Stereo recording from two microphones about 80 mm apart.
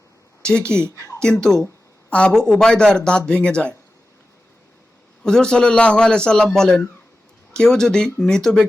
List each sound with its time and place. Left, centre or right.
0.4 s a man's voice: centre
0.9 s speech: left
1.2 s a man's voice: centre
1.6 s a sound: centre
2.3 s a man's voice: centre
5.2 s a man's voice: centre